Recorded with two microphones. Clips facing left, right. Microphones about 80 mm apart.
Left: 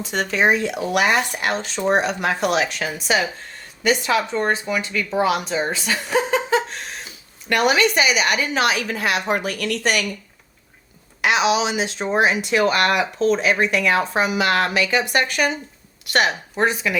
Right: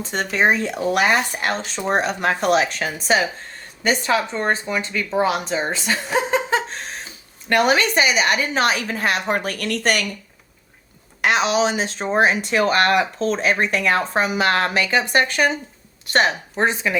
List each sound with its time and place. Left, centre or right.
0.0 s speech: right
6.5 s a sound: right
7.5 s speech: right
11.2 s speech: right